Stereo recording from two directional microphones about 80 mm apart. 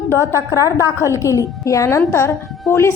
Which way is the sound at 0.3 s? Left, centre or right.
Left.